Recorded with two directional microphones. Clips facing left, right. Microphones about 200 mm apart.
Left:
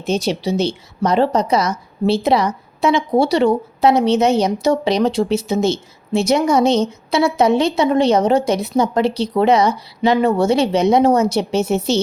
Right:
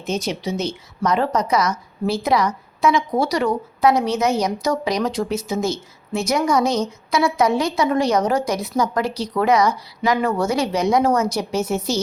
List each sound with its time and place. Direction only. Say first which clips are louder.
0.0 s speech: left 5 dB; 30° left (ahead or behind)